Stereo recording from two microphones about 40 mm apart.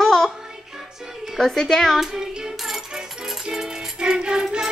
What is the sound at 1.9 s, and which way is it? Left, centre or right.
Music, centre.